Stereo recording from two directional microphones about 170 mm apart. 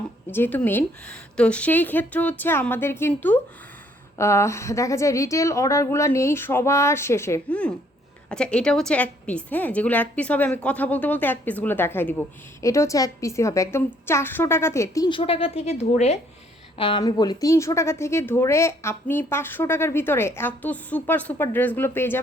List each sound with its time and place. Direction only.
0.3 s speech: 10° left (ahead or behind)
15.2 s a woman's voice: 35° left (ahead or behind); by 22.2 s 15° left (ahead or behind)